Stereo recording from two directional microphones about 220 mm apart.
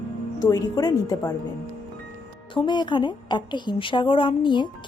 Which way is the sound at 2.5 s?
20° left (ahead or behind).